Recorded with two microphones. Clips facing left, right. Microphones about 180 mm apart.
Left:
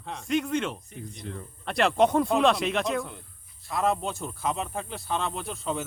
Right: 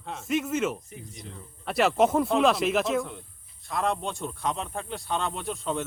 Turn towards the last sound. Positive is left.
turn(degrees=0)  # may be behind; listen again after turning